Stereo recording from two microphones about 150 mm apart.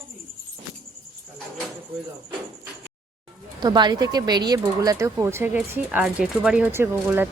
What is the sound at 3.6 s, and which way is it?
Speech, 30° right (ahead or behind).